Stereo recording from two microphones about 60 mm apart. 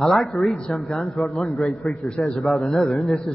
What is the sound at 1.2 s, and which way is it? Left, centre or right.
Speech, centre.